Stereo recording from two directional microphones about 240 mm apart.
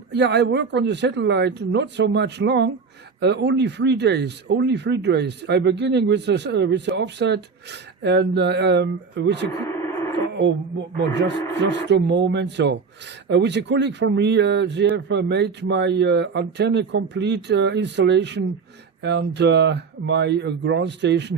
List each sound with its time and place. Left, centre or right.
0.1 s speech: right
9.7 s radio: centre
11.1 s speech: right